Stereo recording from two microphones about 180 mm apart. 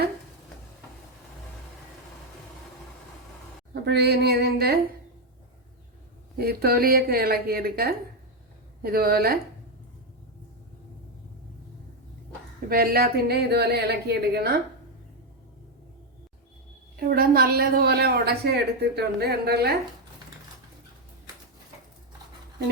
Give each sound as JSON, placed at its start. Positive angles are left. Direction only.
{"t": 3.8, "sound": "a woman's voice", "side_deg": -65}
{"t": 6.3, "sound": "a woman's voice", "side_deg": -60}
{"t": 12.6, "sound": "a woman's voice", "side_deg": -55}
{"t": 17.0, "sound": "a woman's voice", "side_deg": -55}